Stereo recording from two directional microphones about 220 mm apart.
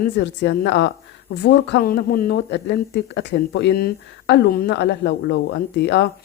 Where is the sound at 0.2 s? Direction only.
50° left (ahead or behind).